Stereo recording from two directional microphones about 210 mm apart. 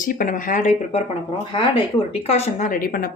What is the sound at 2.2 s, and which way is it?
Speech, 30° left (ahead or behind).